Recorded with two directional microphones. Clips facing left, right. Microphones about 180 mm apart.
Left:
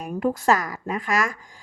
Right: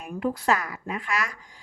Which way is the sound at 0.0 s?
45° left (ahead or behind).